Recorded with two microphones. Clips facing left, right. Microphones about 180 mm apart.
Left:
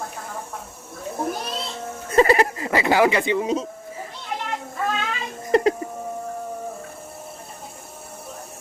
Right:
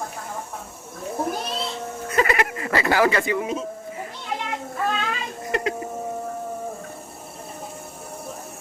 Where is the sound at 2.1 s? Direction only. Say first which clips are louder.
Left 5 dB; 30° left (ahead or behind).